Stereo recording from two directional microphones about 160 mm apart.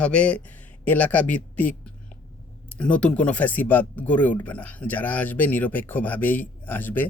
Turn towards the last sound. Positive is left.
turn(degrees=10)  # may be behind; listen again after turning